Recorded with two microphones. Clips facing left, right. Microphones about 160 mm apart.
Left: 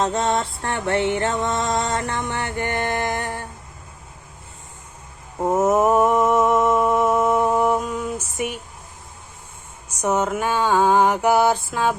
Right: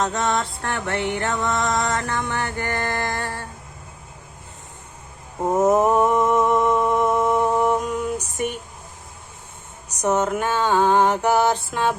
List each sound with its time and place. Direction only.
0.0 s music: 25° left (ahead or behind)
5.6 s mantra: 5° left (ahead or behind)
10.0 s mantra: 10° left (ahead or behind)